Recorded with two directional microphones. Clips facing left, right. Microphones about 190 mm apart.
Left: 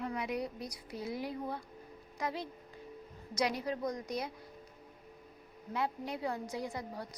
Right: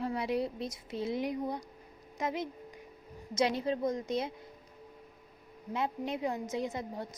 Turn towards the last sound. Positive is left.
turn(degrees=-20)  # may be behind; listen again after turning